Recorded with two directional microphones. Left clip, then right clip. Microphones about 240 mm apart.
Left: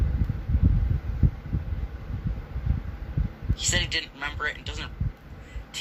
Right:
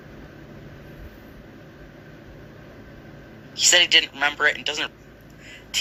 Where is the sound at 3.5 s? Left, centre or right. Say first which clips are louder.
Right 11 dB; right.